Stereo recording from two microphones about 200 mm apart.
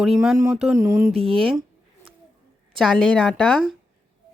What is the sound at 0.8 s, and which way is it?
Speech, 15° right (ahead or behind).